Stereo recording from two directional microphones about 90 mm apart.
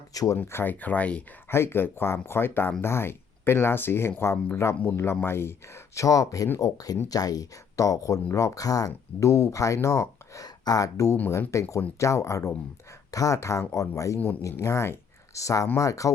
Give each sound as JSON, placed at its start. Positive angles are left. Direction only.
{"t": 0.1, "sound": "speech", "side_deg": 40}
{"t": 0.4, "sound": "speech", "side_deg": 25}
{"t": 1.5, "sound": "speech", "side_deg": 25}